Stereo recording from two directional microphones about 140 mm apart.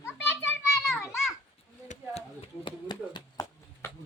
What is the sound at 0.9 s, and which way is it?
Children playing, 20° left (ahead or behind).